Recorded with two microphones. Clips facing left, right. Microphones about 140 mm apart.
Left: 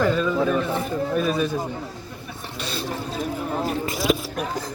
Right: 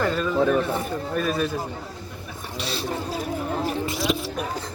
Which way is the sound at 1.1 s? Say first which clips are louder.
Left 1 dB; centre (ahead or behind).